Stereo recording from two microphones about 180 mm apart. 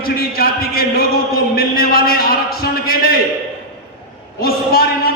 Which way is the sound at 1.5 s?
55° left (ahead or behind).